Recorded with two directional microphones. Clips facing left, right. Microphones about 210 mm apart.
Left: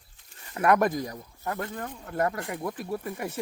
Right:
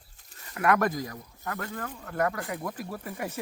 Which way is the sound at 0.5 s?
20° left (ahead or behind).